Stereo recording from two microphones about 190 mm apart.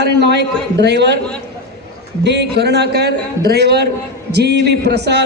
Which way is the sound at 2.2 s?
65° right (ahead or behind).